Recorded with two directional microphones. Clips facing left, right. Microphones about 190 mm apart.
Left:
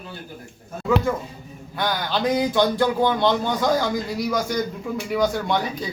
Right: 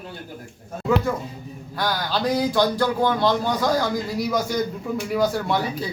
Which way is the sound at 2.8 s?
20° left (ahead or behind).